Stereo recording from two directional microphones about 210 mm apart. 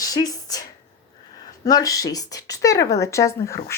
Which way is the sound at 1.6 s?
15° left (ahead or behind).